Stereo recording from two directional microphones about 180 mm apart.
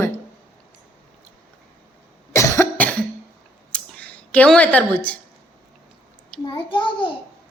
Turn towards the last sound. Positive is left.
turn(degrees=25)  # may be behind; listen again after turning